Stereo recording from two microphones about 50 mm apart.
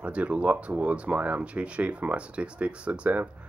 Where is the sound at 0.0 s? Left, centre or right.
Right.